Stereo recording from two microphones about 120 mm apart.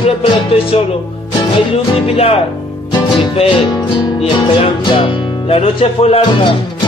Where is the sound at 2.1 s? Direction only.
55° left (ahead or behind).